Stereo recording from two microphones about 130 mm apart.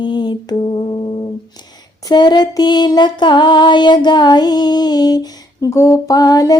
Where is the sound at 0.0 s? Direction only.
35° left (ahead or behind).